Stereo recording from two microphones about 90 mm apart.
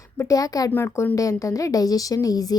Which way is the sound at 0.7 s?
25° left (ahead or behind).